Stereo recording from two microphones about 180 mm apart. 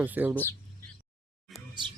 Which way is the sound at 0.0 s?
10° right (ahead or behind).